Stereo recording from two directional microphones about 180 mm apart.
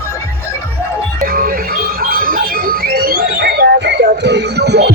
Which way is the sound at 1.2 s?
50° right (ahead or behind).